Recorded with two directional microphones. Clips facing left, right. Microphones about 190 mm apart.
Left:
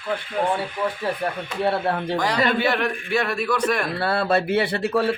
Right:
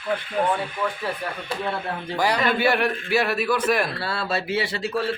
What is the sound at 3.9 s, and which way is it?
A man's voice, 55° left (ahead or behind).